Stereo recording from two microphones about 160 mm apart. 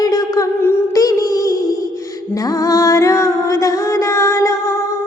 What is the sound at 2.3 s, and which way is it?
Music, 20° left (ahead or behind).